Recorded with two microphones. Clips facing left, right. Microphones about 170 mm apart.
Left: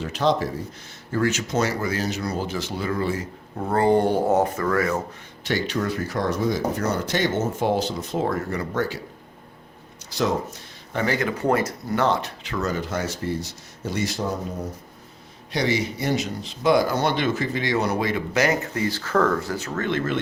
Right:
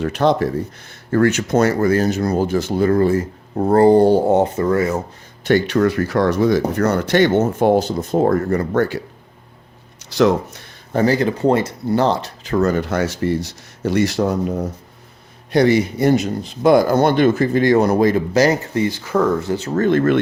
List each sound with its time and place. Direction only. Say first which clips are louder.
0.0 s speech: right 6 dB; 60° right (ahead or behind); by 4.9 s 25° right (ahead or behind)
5.5 s speech: right 9 dB; 60° right (ahead or behind)
10.1 s speech: right 8 dB; 75° right (ahead or behind)
10.9 s speech: right 8 dB; 35° right (ahead or behind)
12.5 s speech: right 9 dB; 55° right (ahead or behind); by 14.6 s 75° right (ahead or behind)
15.5 s speech: right 9 dB; 55° right (ahead or behind)